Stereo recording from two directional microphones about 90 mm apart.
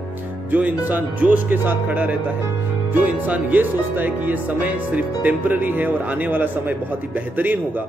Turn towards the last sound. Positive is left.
turn(degrees=-20)  # may be behind; listen again after turning